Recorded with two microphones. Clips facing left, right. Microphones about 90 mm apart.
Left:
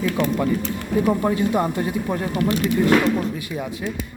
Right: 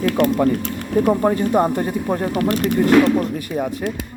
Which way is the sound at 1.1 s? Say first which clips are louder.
Right 3 dB; 40° right (ahead or behind).